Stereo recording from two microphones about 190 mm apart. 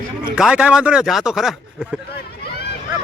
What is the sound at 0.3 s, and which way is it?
Speech, 5° right (ahead or behind).